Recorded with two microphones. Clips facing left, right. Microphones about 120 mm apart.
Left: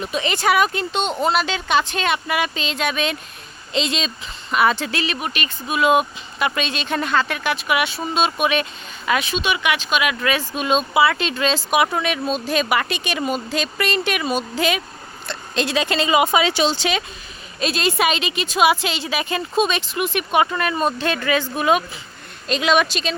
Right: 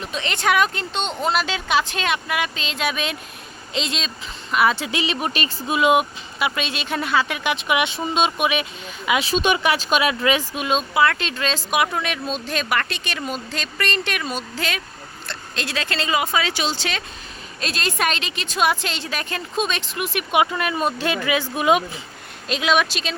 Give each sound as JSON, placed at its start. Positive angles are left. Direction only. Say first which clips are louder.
{"t": 0.0, "sound": "a woman's voice", "louder": "left 3 dB", "side_deg": 5}
{"t": 4.9, "sound": "speech", "louder": "even", "side_deg": -20}
{"t": 5.2, "sound": "speech", "louder": "right 2 dB", "side_deg": -30}
{"t": 5.6, "sound": "speech", "louder": "left 1 dB", "side_deg": -20}
{"t": 9.3, "sound": "speech", "louder": "right 2 dB", "side_deg": -40}
{"t": 10.5, "sound": "speech", "louder": "left 3 dB", "side_deg": -5}
{"t": 17.6, "sound": "a woman's voice", "louder": "left 4 dB", "side_deg": 5}
{"t": 22.4, "sound": "a woman's voice", "louder": "left 2 dB", "side_deg": 0}